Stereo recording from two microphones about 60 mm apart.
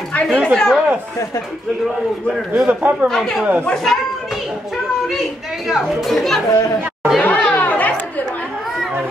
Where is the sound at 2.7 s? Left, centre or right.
Right.